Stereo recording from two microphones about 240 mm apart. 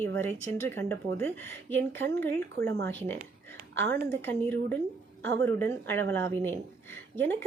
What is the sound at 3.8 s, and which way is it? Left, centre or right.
Speech, right.